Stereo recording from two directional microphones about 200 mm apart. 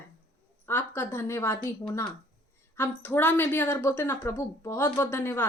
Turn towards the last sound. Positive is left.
turn(degrees=10)  # may be behind; listen again after turning